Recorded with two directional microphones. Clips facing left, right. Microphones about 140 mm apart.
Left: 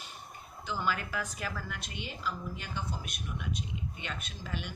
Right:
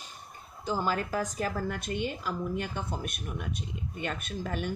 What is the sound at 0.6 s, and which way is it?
Speech, 40° right (ahead or behind).